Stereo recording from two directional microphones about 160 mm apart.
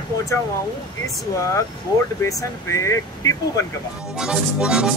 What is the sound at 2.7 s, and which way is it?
Speech, 20° left (ahead or behind).